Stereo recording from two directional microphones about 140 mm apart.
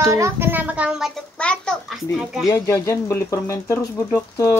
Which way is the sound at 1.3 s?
5° left (ahead or behind).